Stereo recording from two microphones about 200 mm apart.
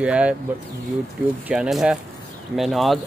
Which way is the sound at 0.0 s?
5° right (ahead or behind).